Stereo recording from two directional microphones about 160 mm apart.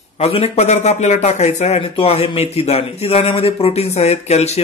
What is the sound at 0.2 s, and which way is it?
Speech, 40° left (ahead or behind).